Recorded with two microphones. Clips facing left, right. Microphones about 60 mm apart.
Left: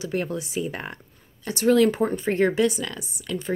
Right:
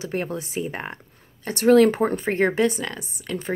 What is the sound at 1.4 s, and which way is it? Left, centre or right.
A woman's voice, right.